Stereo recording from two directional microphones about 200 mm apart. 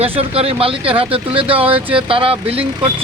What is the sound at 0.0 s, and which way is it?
Speech, 30° right (ahead or behind).